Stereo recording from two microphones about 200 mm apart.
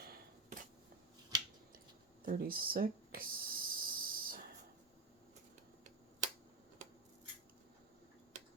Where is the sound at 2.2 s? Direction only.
45° right (ahead or behind).